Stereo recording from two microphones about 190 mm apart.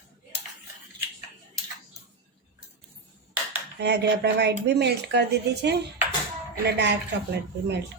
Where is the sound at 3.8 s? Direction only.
65° right (ahead or behind).